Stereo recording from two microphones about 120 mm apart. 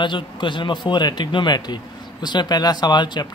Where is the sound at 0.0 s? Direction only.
40° left (ahead or behind).